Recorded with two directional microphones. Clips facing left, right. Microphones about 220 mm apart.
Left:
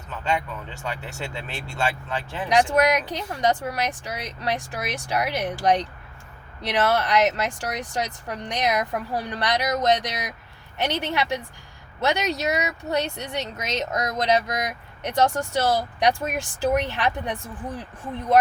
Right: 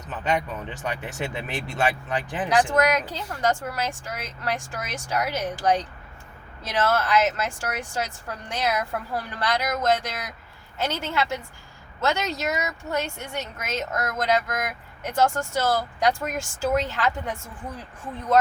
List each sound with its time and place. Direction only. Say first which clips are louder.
0.1 s speech: right 1 dB; 20° right (ahead or behind)
2.6 s speech: left 1 dB; 15° left (ahead or behind)